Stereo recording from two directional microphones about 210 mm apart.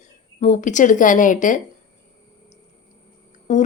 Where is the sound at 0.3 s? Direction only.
35° left (ahead or behind).